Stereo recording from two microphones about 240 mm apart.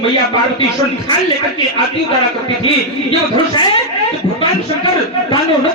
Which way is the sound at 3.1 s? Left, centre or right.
Centre.